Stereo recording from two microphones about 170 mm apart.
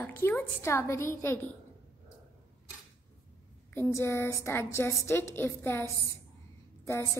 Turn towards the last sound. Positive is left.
turn(degrees=15)  # may be behind; listen again after turning